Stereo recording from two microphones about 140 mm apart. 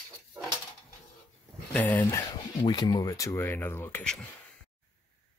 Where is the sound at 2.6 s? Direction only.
30° left (ahead or behind); by 4.3 s 5° left (ahead or behind).